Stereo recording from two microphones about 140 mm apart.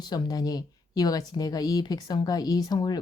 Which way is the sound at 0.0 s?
30° left (ahead or behind).